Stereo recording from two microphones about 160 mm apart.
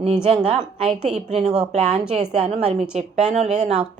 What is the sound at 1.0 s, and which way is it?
A woman's voice, 45° right (ahead or behind).